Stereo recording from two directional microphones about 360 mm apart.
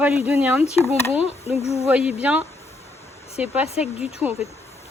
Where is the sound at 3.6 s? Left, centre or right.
Centre.